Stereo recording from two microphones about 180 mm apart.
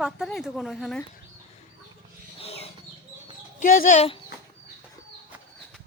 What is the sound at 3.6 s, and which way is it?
Speech, 50° left (ahead or behind).